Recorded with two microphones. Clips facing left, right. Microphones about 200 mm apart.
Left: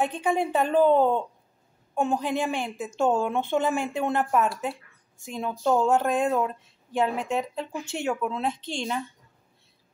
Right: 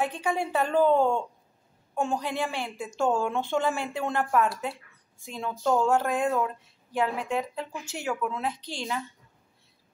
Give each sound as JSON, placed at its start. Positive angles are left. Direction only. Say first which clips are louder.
{"t": 0.0, "sound": "a woman's voice", "louder": "left 3 dB", "side_deg": 20}